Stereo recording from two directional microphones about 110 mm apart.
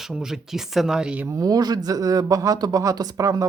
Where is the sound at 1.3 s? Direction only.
35° right (ahead or behind).